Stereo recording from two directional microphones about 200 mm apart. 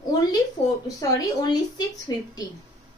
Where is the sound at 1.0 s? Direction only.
15° left (ahead or behind).